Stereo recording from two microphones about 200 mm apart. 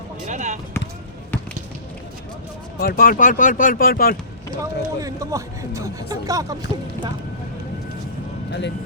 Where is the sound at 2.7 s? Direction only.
50° left (ahead or behind).